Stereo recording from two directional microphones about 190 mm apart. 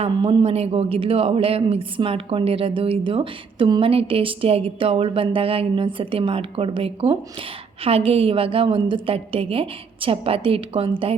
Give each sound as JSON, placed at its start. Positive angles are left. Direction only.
{"t": 0.0, "sound": "speech", "side_deg": -30}